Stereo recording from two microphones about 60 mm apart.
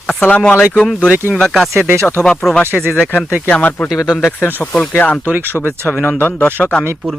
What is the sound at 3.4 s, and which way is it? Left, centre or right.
Speech, left.